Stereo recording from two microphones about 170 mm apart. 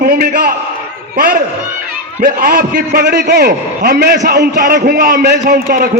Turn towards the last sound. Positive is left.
turn(degrees=-50)  # may be behind; listen again after turning